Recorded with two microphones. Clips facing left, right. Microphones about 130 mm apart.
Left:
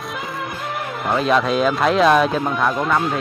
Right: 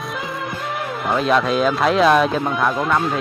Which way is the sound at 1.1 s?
Centre (ahead or behind).